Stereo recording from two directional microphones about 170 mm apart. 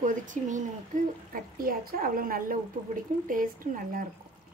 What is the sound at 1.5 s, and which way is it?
A woman's voice, 60° right (ahead or behind).